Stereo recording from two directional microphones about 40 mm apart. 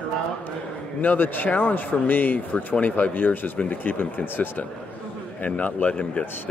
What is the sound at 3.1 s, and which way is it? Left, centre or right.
Speech, left.